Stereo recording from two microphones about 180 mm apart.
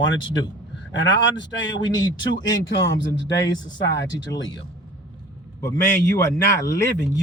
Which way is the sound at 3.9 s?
20° left (ahead or behind).